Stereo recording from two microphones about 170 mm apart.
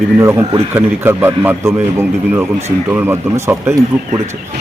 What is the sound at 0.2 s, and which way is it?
A man's voice, 15° right (ahead or behind).